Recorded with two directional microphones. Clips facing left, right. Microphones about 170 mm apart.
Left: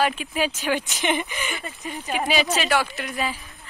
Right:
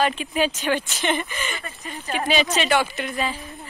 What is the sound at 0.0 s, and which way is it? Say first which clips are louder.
Speech: right 1 dB; 5° left (ahead or behind).